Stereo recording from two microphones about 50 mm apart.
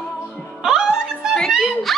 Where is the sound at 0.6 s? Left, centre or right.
Centre.